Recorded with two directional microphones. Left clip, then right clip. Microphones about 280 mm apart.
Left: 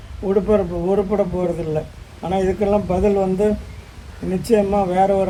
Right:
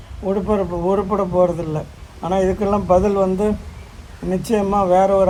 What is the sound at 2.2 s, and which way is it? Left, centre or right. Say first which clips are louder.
A man's voice: right 1 dB; centre.